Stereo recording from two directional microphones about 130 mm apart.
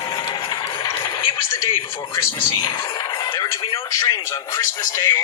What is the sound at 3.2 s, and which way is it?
Music, 30° left (ahead or behind).